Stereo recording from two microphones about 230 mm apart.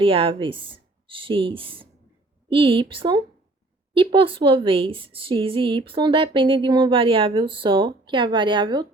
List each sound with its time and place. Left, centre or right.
0.0 s a woman's voice: right